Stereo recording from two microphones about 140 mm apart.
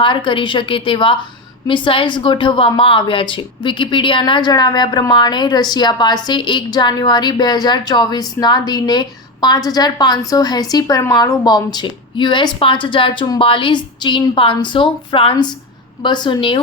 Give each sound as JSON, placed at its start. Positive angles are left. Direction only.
{"t": 0.0, "sound": "a woman's voice", "side_deg": 35}